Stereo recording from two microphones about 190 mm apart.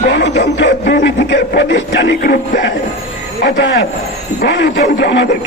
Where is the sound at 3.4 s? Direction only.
70° left (ahead or behind).